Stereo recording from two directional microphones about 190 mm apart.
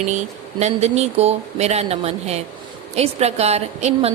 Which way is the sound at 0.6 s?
35° right (ahead or behind).